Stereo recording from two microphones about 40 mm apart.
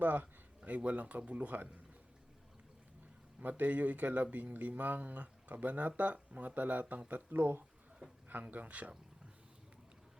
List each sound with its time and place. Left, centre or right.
0.0 s a sound: right
0.8 s speech: right
3.6 s speech: right
7.1 s speech: right
8.3 s speech: right